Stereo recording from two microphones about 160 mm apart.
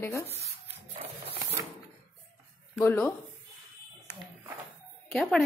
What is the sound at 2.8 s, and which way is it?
Speech, 10° left (ahead or behind).